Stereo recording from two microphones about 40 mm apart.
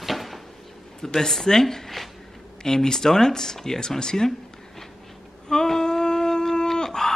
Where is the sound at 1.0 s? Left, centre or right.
Centre.